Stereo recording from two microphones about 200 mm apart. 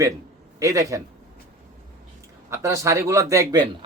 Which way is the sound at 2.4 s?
15° right (ahead or behind).